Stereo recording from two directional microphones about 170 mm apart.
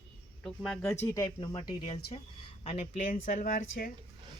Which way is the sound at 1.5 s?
30° left (ahead or behind).